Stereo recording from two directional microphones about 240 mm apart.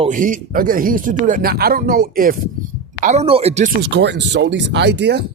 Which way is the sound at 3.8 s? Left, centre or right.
Right.